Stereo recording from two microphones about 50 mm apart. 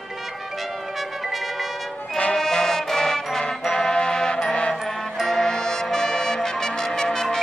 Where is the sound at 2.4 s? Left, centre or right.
Centre.